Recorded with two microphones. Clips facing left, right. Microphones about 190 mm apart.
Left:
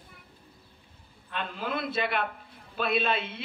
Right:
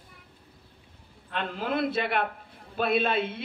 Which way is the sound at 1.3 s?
60° right (ahead or behind).